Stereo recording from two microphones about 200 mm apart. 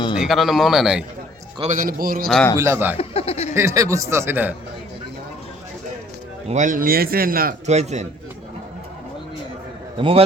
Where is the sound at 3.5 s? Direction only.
15° right (ahead or behind).